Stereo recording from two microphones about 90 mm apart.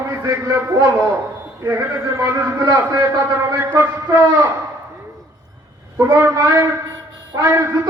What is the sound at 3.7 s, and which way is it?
Speech, 25° right (ahead or behind).